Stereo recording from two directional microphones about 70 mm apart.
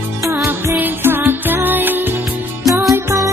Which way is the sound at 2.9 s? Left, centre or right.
Right.